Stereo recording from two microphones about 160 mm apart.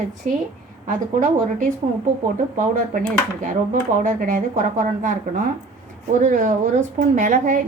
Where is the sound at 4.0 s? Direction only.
55° right (ahead or behind).